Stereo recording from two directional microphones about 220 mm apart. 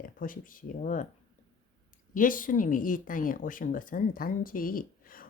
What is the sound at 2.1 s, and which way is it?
A woman's voice, 40° left (ahead or behind).